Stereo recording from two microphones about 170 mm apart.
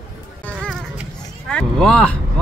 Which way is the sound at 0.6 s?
Centre (ahead or behind).